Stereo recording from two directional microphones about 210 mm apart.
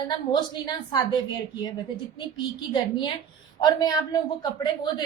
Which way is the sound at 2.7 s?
20° left (ahead or behind).